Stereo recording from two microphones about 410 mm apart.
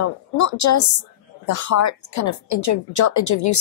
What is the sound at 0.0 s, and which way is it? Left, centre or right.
A woman's voice, left.